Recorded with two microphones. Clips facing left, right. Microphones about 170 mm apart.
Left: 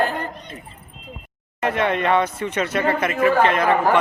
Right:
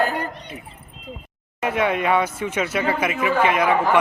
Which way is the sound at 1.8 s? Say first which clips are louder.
Even; 10° right (ahead or behind).